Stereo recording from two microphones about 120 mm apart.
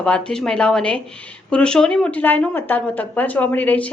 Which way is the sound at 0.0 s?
5° left (ahead or behind).